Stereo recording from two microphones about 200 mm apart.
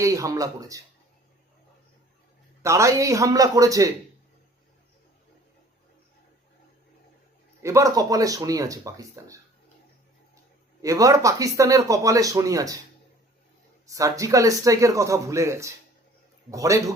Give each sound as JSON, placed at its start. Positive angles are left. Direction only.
{"t": 0.0, "sound": "speech", "side_deg": -15}
{"t": 2.6, "sound": "speech", "side_deg": -15}
{"t": 7.6, "sound": "speech", "side_deg": -15}
{"t": 10.8, "sound": "speech", "side_deg": -15}
{"t": 13.8, "sound": "speech", "side_deg": -15}